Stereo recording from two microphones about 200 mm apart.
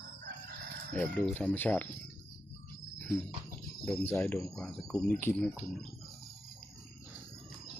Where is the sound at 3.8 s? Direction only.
10° left (ahead or behind).